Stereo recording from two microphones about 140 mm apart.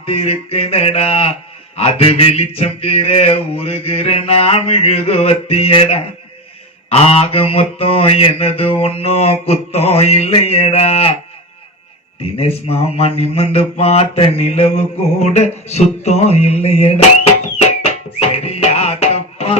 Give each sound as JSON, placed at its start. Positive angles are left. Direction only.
{"t": 0.0, "sound": "mantra", "side_deg": 45}
{"t": 12.2, "sound": "mantra", "side_deg": 45}
{"t": 17.8, "sound": "music", "side_deg": 45}